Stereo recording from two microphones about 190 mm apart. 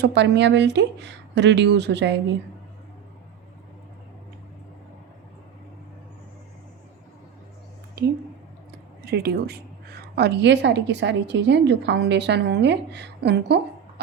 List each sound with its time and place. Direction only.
0.0 s speech: 65° right (ahead or behind)
8.0 s a sound: 55° right (ahead or behind)
9.0 s a woman's voice: 60° right (ahead or behind)